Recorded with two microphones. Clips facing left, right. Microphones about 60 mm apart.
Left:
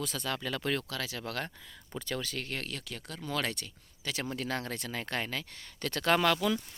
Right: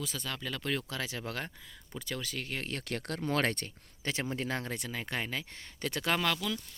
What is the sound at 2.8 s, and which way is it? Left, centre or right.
Speech, right.